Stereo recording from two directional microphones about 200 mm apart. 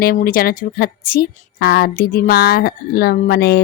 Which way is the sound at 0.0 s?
45° left (ahead or behind).